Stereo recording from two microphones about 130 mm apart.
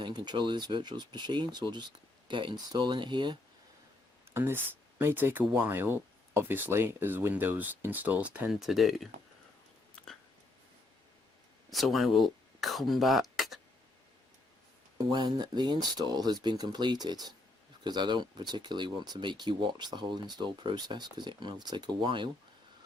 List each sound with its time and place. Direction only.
0.0 s speech: 35° right (ahead or behind)
4.4 s speech: 15° right (ahead or behind); by 9.0 s centre (ahead or behind)
11.7 s speech: centre (ahead or behind)
14.9 s speech: 30° right (ahead or behind)